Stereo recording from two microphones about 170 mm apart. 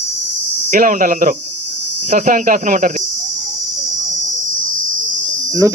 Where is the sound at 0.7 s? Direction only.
50° right (ahead or behind).